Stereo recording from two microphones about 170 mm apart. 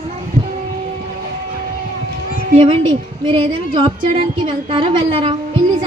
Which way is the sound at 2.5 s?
35° right (ahead or behind).